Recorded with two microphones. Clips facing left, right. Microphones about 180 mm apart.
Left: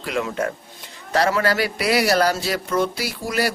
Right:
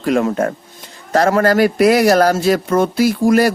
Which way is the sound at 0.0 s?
45° right (ahead or behind).